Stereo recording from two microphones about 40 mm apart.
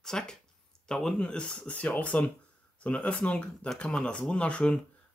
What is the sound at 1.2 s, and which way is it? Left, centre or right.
Speech, left.